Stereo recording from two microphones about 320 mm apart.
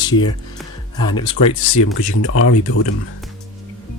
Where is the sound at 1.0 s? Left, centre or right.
Centre.